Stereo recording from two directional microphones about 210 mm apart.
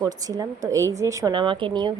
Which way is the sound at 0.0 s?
15° right (ahead or behind).